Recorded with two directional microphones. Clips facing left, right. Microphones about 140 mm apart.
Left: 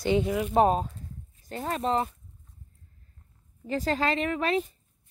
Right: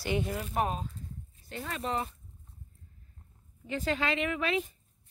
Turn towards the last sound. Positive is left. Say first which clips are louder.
# left 4 dB
turn(degrees=35)  # may be behind; listen again after turning